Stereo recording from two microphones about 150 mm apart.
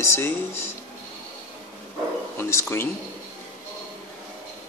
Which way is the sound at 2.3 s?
15° left (ahead or behind).